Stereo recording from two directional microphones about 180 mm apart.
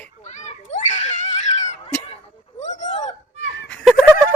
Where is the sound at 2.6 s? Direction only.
40° left (ahead or behind).